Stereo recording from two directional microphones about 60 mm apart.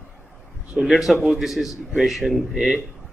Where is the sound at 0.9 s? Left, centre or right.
Centre.